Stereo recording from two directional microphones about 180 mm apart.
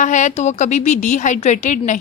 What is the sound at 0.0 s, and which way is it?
A woman's voice, 40° left (ahead or behind).